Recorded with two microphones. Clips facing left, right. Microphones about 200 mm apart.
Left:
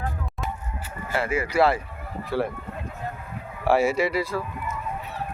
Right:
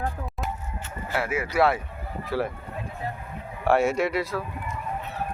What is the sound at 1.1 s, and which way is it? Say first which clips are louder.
A man's voice: left 2 dB; centre (ahead or behind).